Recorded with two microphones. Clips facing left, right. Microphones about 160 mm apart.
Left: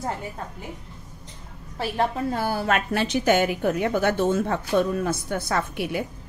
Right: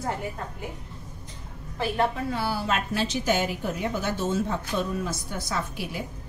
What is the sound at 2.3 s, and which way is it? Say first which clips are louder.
A woman's voice: left 3 dB; 50° left (ahead or behind).